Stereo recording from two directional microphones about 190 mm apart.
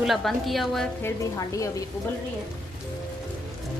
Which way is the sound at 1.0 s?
15° left (ahead or behind).